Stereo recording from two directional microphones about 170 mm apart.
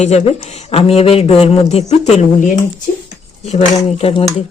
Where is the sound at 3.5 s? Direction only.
35° left (ahead or behind).